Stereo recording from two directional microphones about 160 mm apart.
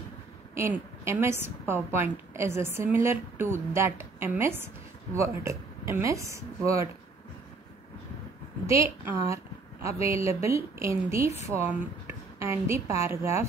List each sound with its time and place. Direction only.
0.6 s a woman's voice: 15° right (ahead or behind)
8.6 s a woman's voice: 20° right (ahead or behind)